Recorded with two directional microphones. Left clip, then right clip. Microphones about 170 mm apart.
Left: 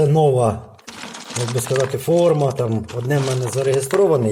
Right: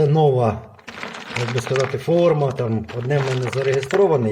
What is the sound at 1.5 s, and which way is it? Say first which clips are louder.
Speech: left 2 dB; 20° right (ahead or behind).